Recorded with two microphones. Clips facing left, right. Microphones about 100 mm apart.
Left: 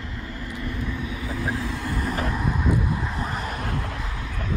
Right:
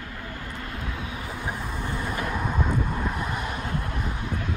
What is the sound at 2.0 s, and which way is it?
Vehicle, 40° left (ahead or behind).